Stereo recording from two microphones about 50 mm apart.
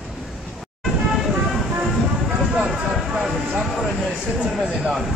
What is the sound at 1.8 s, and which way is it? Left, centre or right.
Music, centre.